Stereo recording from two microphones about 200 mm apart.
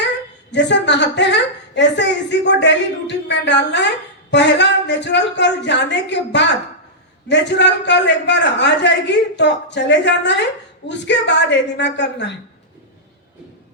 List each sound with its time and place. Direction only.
0.5 s a man's voice: 60° left (ahead or behind)